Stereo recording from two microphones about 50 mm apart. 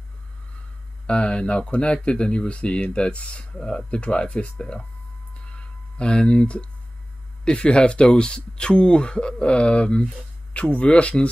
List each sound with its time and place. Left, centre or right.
1.0 s speech: centre
5.3 s a sound: left
7.4 s speech: centre